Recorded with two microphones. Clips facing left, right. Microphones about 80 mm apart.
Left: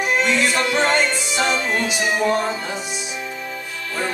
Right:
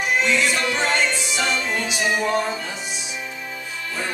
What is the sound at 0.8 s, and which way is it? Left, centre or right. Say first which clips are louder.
Music: left 3 dB; left.